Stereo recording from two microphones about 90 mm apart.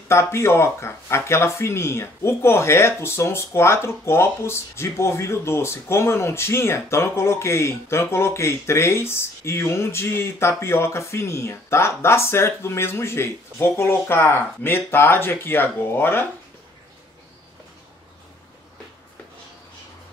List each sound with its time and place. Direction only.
0.1 s speech: 30° left (ahead or behind)